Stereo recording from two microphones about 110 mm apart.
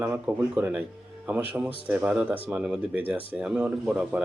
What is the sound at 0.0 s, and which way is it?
A man's voice, 15° right (ahead or behind).